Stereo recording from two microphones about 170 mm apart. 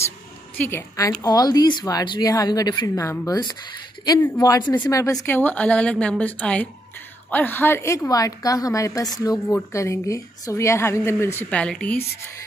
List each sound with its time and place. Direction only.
0.6 s a woman's voice: 15° left (ahead or behind)